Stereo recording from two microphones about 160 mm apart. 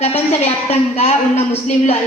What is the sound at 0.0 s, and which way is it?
A woman's voice, 40° left (ahead or behind).